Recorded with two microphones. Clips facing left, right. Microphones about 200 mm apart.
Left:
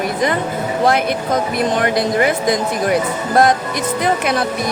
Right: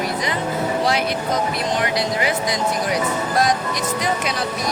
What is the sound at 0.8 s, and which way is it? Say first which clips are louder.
Speech: left 5 dB; 55° left (ahead or behind).